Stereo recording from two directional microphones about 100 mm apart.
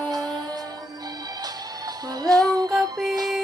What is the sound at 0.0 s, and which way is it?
Music, 40° right (ahead or behind).